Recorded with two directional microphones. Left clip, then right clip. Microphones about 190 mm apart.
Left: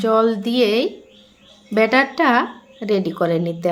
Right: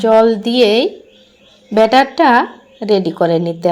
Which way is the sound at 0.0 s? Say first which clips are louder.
Right 7 dB; 10° right (ahead or behind).